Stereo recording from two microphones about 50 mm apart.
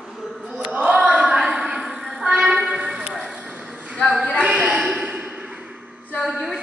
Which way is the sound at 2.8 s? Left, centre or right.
Right.